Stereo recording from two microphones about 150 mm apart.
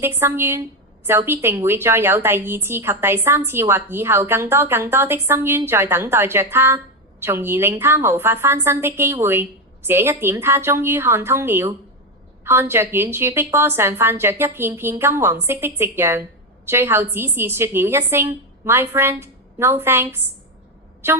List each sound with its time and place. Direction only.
0.0 s a woman's voice: 15° right (ahead or behind)